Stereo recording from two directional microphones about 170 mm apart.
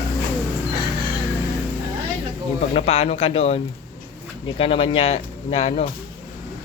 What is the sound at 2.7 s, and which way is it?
Speech, 35° left (ahead or behind).